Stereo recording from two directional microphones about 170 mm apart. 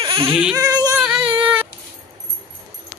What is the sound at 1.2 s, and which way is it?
Child singing, 30° right (ahead or behind).